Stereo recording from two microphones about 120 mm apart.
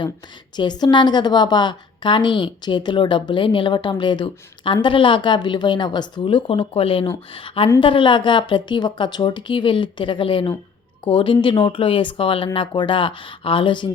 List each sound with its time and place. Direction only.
0.5 s a woman's voice: 35° left (ahead or behind)